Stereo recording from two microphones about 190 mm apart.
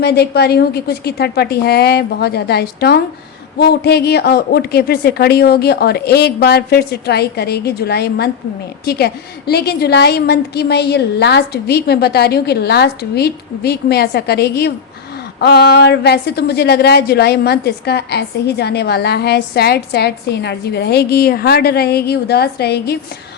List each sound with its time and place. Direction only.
0.0 s a woman's voice: 60° left (ahead or behind)